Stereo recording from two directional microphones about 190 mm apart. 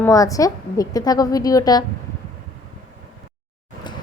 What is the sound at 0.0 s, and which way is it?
A woman's voice, 15° left (ahead or behind).